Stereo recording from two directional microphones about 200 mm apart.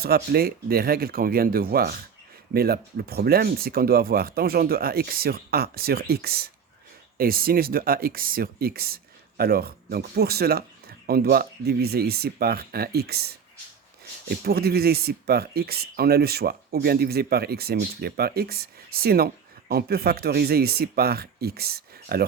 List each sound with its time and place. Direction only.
0.0 s speech: 50° right (ahead or behind)